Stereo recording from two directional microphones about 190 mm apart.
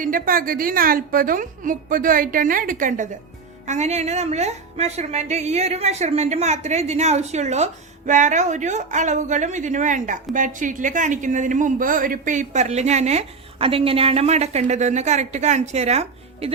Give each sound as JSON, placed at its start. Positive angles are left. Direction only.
{"t": 0.0, "sound": "a woman's voice", "side_deg": -45}